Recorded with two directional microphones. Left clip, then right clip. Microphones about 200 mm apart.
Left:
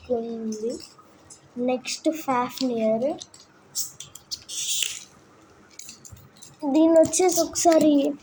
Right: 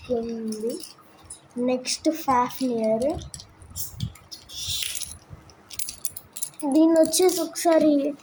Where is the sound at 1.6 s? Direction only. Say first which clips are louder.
Right 1 dB; 5° right (ahead or behind).